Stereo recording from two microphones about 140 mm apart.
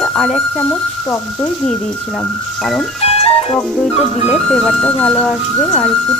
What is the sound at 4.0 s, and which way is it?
Speech, 50° left (ahead or behind).